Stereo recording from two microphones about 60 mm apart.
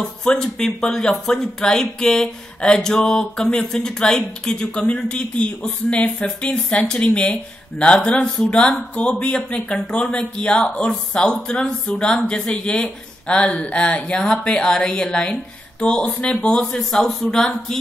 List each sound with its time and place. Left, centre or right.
0.0 s speech: centre